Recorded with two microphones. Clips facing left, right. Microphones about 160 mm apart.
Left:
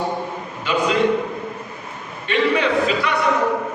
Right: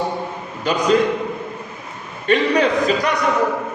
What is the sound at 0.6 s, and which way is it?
Speech, 40° right (ahead or behind).